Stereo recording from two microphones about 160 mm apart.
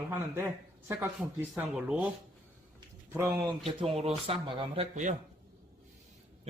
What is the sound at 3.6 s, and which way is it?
A man's voice, 35° right (ahead or behind).